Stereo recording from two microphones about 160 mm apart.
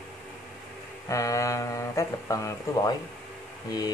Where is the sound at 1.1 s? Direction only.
20° left (ahead or behind).